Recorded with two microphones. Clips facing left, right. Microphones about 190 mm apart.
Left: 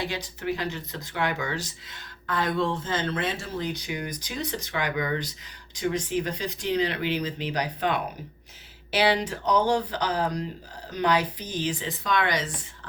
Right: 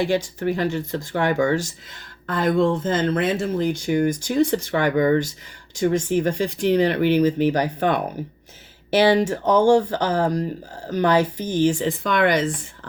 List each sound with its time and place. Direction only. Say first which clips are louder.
0.3 s speech: right 7 dB; 50° right (ahead or behind)